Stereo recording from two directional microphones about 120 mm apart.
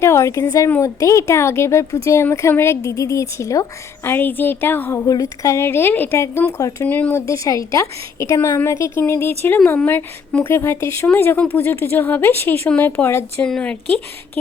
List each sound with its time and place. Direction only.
0.0 s a woman's voice: 25° left (ahead or behind)
4.9 s a woman's voice: 30° left (ahead or behind)
6.8 s a woman's voice: 15° left (ahead or behind)